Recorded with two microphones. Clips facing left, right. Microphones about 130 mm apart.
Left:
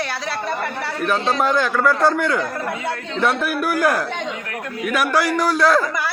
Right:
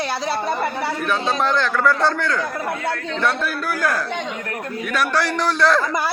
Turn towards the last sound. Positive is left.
turn(degrees=5)  # may be behind; listen again after turning